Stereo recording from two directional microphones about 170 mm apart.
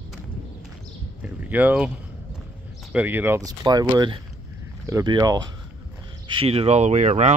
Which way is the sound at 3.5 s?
20° right (ahead or behind).